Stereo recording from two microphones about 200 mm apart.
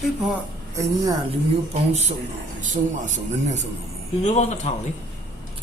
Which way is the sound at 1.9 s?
35° right (ahead or behind).